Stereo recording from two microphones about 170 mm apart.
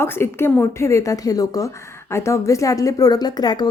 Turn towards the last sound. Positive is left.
turn(degrees=25)  # may be behind; listen again after turning